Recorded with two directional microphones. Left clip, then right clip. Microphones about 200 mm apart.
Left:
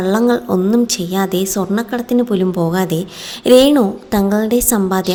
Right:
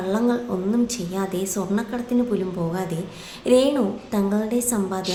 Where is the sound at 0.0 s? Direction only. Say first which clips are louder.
Left 8 dB; 45° left (ahead or behind).